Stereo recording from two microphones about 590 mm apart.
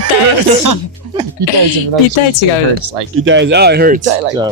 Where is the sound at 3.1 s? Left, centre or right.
Centre.